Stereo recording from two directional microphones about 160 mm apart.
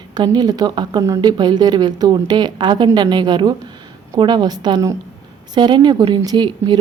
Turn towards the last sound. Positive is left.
turn(degrees=-30)  # may be behind; listen again after turning